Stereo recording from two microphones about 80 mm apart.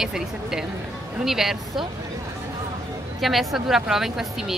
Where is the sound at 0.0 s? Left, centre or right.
Centre.